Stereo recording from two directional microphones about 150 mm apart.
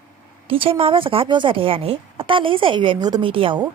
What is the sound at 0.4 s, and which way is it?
A woman's voice, 35° right (ahead or behind).